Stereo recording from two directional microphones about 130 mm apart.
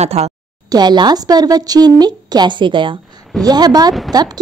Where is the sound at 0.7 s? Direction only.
35° right (ahead or behind).